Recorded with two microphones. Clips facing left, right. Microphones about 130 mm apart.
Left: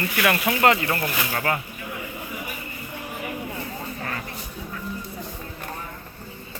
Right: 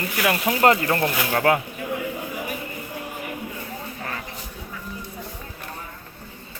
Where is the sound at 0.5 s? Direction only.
35° right (ahead or behind).